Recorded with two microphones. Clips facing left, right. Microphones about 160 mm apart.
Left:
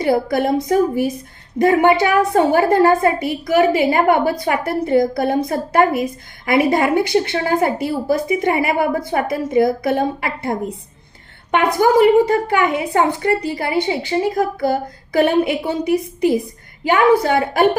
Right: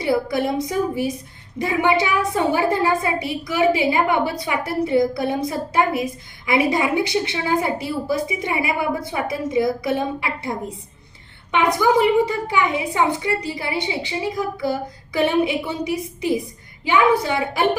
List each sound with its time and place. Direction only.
0.0 s a woman's voice: 50° left (ahead or behind)
11.5 s a woman's voice: 55° left (ahead or behind)